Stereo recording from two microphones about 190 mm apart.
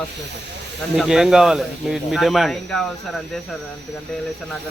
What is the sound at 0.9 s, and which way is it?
Speech, 5° right (ahead or behind).